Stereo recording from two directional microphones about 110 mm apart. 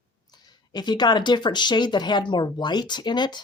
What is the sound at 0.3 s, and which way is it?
Speech, 40° left (ahead or behind).